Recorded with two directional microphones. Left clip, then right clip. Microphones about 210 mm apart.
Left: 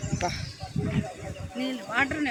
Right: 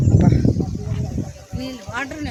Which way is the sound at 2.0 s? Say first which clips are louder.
Left 1 dB; 55° right (ahead or behind).